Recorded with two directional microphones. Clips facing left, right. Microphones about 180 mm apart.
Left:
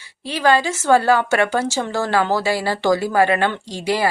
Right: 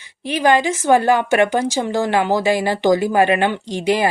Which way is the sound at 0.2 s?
20° right (ahead or behind).